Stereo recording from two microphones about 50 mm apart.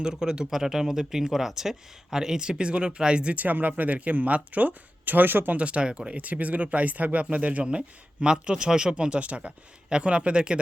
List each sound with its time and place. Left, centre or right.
0.0 s speech: centre
3.3 s speech: right
5.5 s speech: right
6.1 s speech: right